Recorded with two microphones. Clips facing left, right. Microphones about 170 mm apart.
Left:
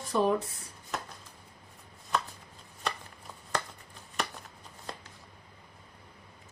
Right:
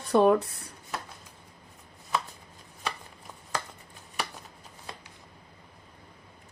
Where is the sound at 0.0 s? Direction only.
65° right (ahead or behind).